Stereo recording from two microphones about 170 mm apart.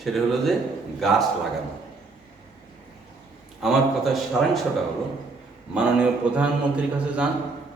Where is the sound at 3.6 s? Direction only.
Centre (ahead or behind).